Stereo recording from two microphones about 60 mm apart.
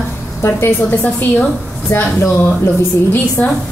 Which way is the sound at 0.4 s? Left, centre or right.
Left.